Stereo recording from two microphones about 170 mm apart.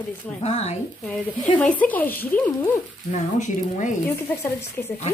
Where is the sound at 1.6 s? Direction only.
10° left (ahead or behind).